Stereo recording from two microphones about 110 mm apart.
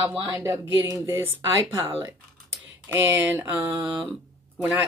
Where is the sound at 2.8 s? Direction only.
20° right (ahead or behind).